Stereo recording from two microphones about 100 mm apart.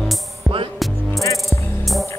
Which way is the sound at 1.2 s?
35° left (ahead or behind).